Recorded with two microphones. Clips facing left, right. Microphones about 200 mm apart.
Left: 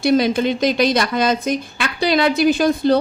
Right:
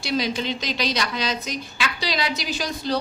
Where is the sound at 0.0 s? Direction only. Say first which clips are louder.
Left 9 dB; 55° left (ahead or behind).